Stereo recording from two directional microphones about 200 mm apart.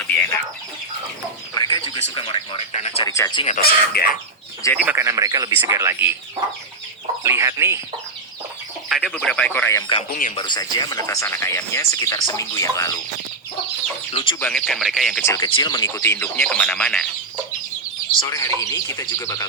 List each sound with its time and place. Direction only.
1.5 s a sound: 20° left (ahead or behind)
3.1 s speech: 20° left (ahead or behind)
3.6 s speech: 50° left (ahead or behind)
4.6 s speech: 15° left (ahead or behind)
4.9 s speech: 15° right (ahead or behind)
7.3 s speech: 15° right (ahead or behind)
8.9 s speech: centre (ahead or behind)
10.1 s speech: 45° left (ahead or behind)
10.3 s speech: 20° left (ahead or behind)
14.1 s speech: 30° left (ahead or behind)
14.3 s speech: 5° left (ahead or behind)
15.3 s speech: 20° left (ahead or behind)
16.0 s speech: 10° left (ahead or behind)
18.2 s speech: 15° left (ahead or behind)